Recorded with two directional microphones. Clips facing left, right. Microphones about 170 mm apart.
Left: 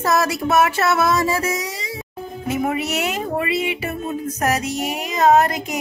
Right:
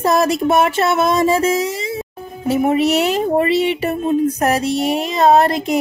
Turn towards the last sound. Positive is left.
turn(degrees=-35)  # may be behind; listen again after turning